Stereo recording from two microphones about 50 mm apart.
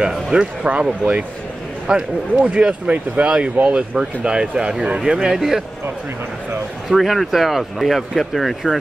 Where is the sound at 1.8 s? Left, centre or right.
Right; by 5.6 s centre.